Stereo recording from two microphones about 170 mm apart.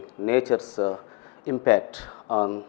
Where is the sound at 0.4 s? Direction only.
25° left (ahead or behind).